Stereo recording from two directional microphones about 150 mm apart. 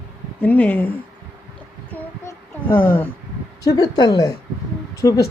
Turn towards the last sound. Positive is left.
turn(degrees=20)  # may be behind; listen again after turning